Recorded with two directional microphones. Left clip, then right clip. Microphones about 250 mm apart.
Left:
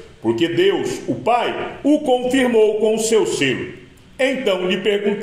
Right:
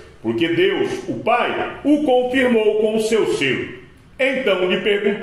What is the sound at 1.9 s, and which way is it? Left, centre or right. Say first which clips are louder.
Speech: even; left.